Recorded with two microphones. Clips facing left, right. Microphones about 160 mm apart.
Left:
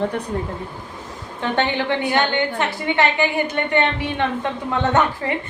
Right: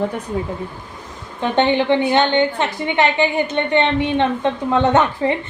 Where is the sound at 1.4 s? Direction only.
20° right (ahead or behind).